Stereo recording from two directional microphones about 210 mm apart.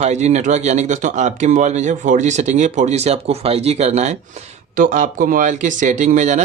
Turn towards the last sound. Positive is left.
turn(degrees=-35)  # may be behind; listen again after turning